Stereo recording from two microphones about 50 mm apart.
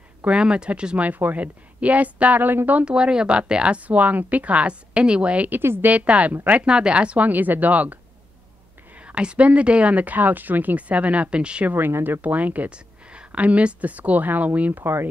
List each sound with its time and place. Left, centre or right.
0.3 s speech: centre; by 2.8 s right
2.8 s speech: centre
5.5 s speech: right
5.9 s speech: right
6.7 s speech: centre
7.2 s speech: right
9.0 s speech: centre
11.6 s speech: right
12.2 s a woman's voice: right
14.8 s speech: right